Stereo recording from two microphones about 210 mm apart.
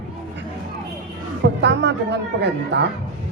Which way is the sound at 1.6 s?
55° right (ahead or behind).